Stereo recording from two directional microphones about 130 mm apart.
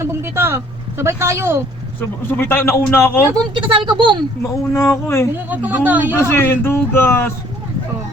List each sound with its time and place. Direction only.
0.0 s speech: 20° right (ahead or behind)
2.3 s a man's voice: 15° left (ahead or behind)
3.3 s speech: 40° right (ahead or behind)
4.9 s speech: 20° left (ahead or behind)
5.5 s speech: 10° right (ahead or behind)
6.1 s speech: 20° left (ahead or behind)